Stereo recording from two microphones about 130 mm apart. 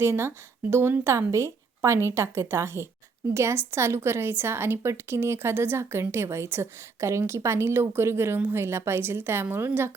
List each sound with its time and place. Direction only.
0.0 s a woman's voice: 20° right (ahead or behind)